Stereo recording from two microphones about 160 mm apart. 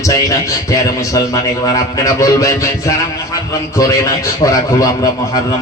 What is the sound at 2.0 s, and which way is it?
Speech, 20° left (ahead or behind).